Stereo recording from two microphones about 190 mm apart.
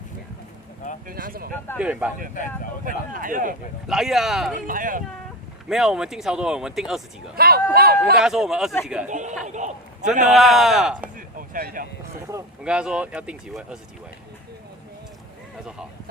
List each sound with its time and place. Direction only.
1.0 s speech: 50° right (ahead or behind)
1.8 s speech: 5° right (ahead or behind)
2.8 s speech: 45° right (ahead or behind)
3.8 s speech: centre (ahead or behind)
4.5 s speech: 45° right (ahead or behind)
5.6 s speech: centre (ahead or behind)
7.3 s speech: 55° right (ahead or behind)
8.2 s speech: centre (ahead or behind)
9.0 s a man's voice: 40° right (ahead or behind)
10.3 s speech: centre (ahead or behind)
11.3 s a sound: 50° right (ahead or behind)
12.6 s speech: 5° right (ahead or behind)